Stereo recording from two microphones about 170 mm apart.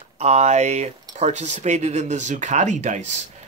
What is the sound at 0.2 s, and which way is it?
Speech, 40° right (ahead or behind).